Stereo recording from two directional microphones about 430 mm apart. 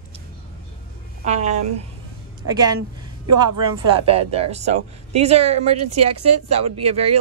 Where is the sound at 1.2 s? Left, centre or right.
Centre.